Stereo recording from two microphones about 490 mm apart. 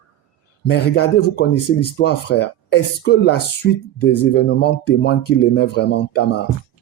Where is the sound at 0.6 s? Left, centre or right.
Centre.